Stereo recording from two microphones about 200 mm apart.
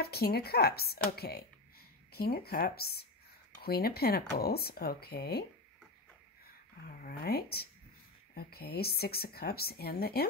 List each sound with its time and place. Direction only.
0.0 s speech: 50° left (ahead or behind)
7.0 s speech: 50° left (ahead or behind)